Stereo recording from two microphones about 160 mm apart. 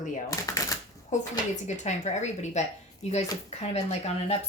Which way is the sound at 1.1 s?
45° left (ahead or behind).